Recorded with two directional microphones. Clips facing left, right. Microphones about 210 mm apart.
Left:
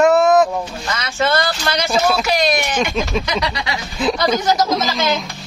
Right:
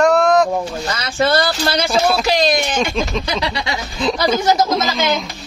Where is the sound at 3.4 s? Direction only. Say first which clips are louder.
Right 1 dB; 25° right (ahead or behind).